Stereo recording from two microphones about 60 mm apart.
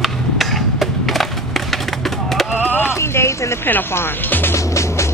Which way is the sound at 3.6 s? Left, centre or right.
Left.